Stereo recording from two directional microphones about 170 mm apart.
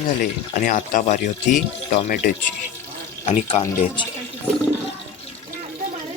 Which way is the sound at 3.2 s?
35° left (ahead or behind).